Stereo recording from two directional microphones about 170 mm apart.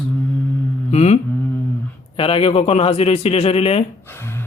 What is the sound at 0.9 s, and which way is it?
Mantra, 40° left (ahead or behind).